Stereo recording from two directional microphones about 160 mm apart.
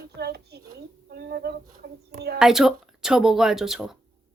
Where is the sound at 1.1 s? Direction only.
80° right.